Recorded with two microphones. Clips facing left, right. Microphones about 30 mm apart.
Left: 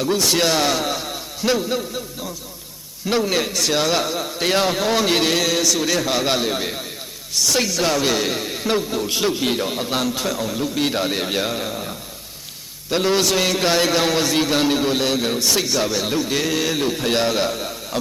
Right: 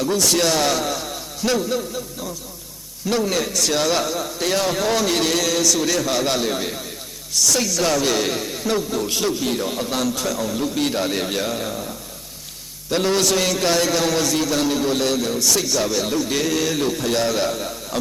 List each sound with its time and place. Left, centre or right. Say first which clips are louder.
0.0 s a man's voice: even; centre
3.1 s a man's voice: left 1 dB; left